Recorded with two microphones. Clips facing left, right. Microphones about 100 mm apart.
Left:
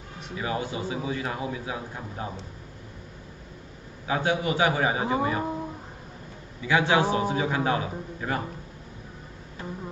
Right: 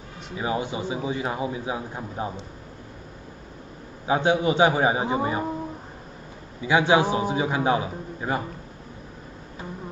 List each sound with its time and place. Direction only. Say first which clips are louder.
0.4 s a man's voice: right 3 dB; 20° right (ahead or behind)
4.1 s a man's voice: right 4 dB; 25° right (ahead or behind)
6.6 s a man's voice: right 3 dB; 20° right (ahead or behind)